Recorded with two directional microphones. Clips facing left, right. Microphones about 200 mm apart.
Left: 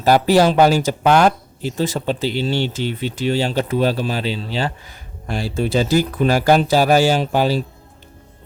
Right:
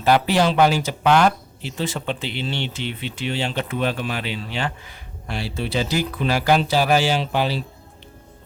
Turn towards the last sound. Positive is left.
turn(degrees=45)  # may be behind; listen again after turning